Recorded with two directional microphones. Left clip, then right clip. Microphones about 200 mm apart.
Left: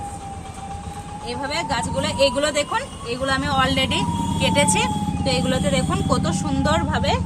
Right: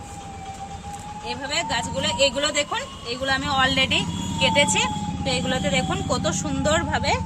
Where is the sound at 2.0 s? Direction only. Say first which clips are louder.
Left 1 dB; 20° left (ahead or behind).